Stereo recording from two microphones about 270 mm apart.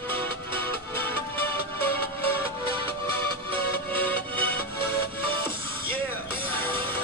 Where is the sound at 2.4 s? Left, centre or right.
Centre.